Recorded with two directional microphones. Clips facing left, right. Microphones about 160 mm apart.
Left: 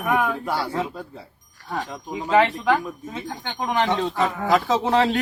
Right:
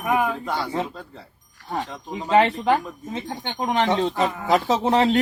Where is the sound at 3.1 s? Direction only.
25° right (ahead or behind).